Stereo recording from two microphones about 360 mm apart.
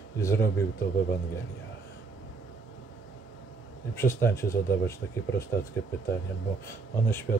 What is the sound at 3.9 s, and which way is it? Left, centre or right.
Speech, centre.